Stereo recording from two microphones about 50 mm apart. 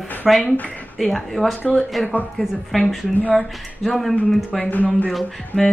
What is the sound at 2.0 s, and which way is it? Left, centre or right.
Speech, centre.